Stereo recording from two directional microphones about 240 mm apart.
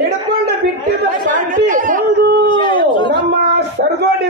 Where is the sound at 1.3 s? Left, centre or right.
Right.